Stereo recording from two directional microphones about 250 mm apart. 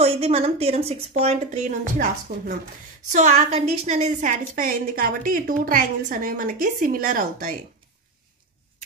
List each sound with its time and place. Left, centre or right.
0.0 s a woman's voice: right